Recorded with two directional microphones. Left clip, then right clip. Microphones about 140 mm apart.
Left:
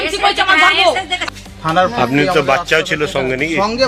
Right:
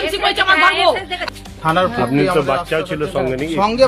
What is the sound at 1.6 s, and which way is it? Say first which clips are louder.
Speech: left 2 dB; 30° right (ahead or behind).